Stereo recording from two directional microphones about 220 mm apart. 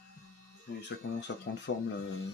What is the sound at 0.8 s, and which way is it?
Speech, 55° left (ahead or behind).